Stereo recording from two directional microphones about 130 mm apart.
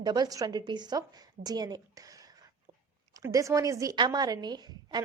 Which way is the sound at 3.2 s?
25° right (ahead or behind).